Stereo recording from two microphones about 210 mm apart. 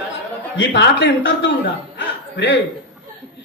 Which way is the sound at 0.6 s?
55° left (ahead or behind).